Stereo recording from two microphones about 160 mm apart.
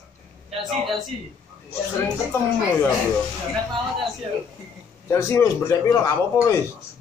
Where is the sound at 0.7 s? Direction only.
Centre (ahead or behind).